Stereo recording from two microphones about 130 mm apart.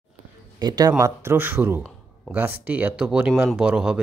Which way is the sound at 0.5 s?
30° right (ahead or behind).